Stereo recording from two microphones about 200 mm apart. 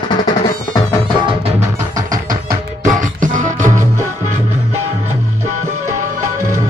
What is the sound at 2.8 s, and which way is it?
Music, 40° right (ahead or behind).